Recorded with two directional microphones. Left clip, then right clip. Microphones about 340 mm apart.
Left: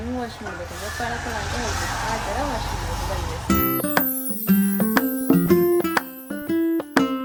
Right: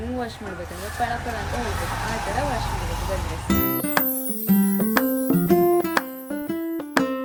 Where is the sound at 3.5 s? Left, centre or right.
Centre.